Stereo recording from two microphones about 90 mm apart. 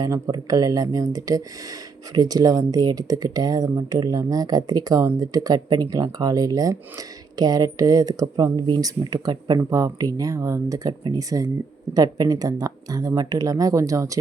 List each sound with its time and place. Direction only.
0.0 s speech: 45° right (ahead or behind)
9.6 s speech: 40° right (ahead or behind)